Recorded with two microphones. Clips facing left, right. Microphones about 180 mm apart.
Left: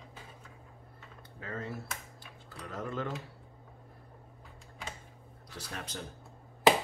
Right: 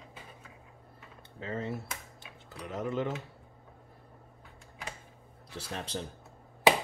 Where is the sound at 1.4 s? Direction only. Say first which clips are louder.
Right 4 dB; 25° right (ahead or behind).